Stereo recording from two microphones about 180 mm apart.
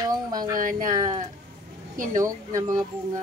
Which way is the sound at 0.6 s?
50° right (ahead or behind).